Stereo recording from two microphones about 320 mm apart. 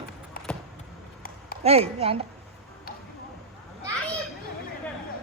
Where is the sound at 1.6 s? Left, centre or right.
Centre.